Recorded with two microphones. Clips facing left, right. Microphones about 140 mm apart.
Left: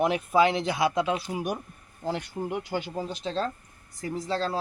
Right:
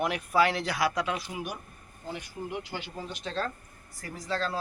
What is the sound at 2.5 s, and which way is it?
Speech, 45° left (ahead or behind).